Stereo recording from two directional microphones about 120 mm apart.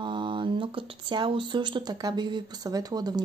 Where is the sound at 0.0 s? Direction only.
40° right (ahead or behind).